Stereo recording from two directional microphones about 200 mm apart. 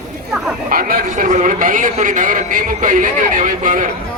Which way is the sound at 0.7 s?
45° right (ahead or behind).